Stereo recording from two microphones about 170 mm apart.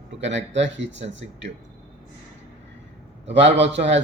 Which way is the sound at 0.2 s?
90° right.